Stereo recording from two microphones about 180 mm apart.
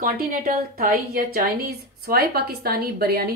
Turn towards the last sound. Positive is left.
turn(degrees=-60)  # may be behind; listen again after turning